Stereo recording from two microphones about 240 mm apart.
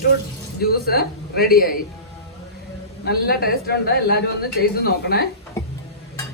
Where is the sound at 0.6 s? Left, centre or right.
Left.